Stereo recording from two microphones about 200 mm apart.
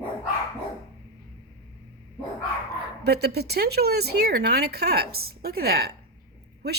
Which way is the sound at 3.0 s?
55° right (ahead or behind).